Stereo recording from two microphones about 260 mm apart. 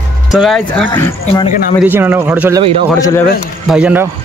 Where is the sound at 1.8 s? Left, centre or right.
Centre.